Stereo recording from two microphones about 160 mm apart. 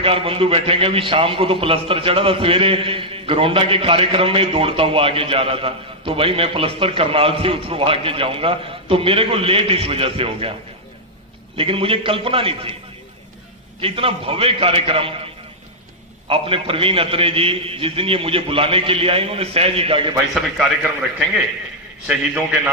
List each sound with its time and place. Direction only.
0.0 s a man's voice: 35° right (ahead or behind)
11.5 s a man's voice: 35° right (ahead or behind)
13.7 s a man's voice: 35° right (ahead or behind)
16.3 s a man's voice: 35° right (ahead or behind)
22.0 s a man's voice: 5° right (ahead or behind)